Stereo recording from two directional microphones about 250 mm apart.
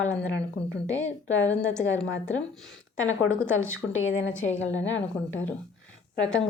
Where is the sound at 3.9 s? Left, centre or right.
Left.